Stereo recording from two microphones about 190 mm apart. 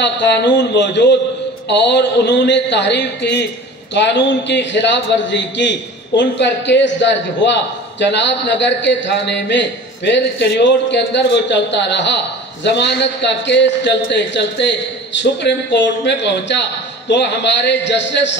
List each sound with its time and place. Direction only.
0.0 s a man's voice: 65° left (ahead or behind)